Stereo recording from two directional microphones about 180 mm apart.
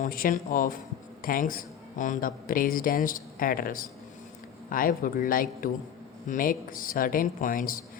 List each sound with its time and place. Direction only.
0.0 s speech: 50° left (ahead or behind)